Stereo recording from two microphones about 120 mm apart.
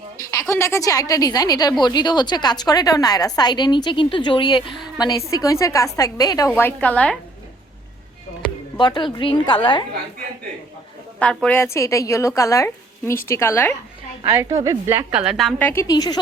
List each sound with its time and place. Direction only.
0.2 s a woman's voice: 25° left (ahead or behind)
6.6 s a woman's voice: 15° left (ahead or behind)
8.8 s a woman's voice: 40° left (ahead or behind)
11.4 s a woman's voice: 20° left (ahead or behind)
14.3 s a woman's voice: 25° right (ahead or behind)
15.1 s a woman's voice: 5° right (ahead or behind)
15.5 s a woman's voice: 20° left (ahead or behind)
15.9 s a woman's voice: 35° left (ahead or behind)